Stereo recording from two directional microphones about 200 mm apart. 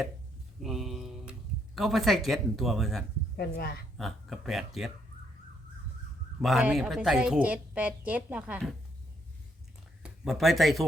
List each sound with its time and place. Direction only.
0.6 s a sound: centre (ahead or behind)
3.3 s speech: 50° left (ahead or behind)
3.9 s a woman's voice: centre (ahead or behind)
6.4 s a woman's voice: centre (ahead or behind)
10.0 s speech: centre (ahead or behind)